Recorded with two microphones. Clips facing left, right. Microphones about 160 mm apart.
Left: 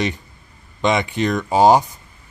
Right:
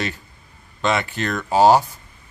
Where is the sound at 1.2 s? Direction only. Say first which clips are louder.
Left 1 dB; 15° left (ahead or behind).